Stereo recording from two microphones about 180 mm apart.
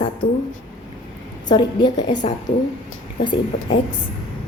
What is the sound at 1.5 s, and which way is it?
A woman's voice, 25° left (ahead or behind).